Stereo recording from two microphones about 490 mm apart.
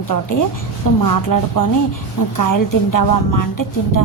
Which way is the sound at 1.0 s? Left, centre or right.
Left.